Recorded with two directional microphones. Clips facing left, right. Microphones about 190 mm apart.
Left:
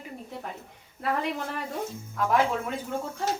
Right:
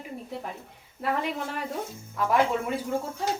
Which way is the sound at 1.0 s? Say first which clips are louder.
Even; centre (ahead or behind).